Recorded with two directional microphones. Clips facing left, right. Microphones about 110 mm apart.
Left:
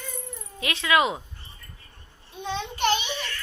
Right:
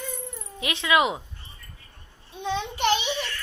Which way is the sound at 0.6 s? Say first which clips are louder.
Even; 20° right (ahead or behind).